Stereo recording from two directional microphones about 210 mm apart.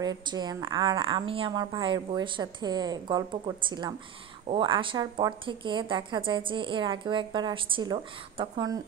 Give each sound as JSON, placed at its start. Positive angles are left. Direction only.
{"t": 0.0, "sound": "speech", "side_deg": -20}